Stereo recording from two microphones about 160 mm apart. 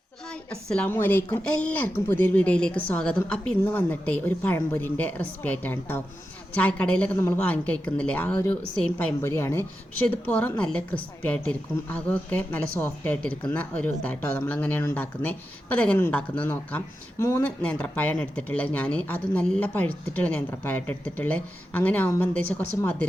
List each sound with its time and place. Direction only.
0.3 s speech: 5° left (ahead or behind)